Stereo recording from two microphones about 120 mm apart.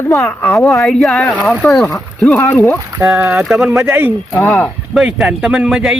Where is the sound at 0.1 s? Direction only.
25° left (ahead or behind).